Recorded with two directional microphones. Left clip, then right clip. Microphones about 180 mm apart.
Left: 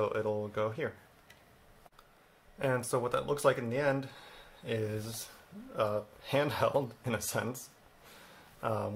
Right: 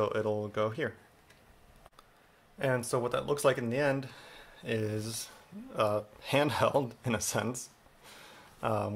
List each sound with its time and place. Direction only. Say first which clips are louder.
0.0 s speech: right 1 dB; 30° right (ahead or behind)
2.6 s speech: right 1 dB; 20° right (ahead or behind)